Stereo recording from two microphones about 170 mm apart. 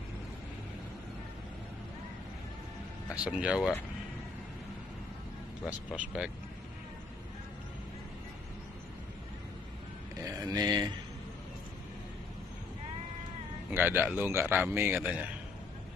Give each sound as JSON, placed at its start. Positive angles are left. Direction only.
{"t": 3.3, "sound": "speech", "side_deg": -5}
{"t": 5.9, "sound": "speech", "side_deg": -5}
{"t": 10.2, "sound": "speech", "side_deg": -20}
{"t": 13.7, "sound": "a man's voice", "side_deg": -10}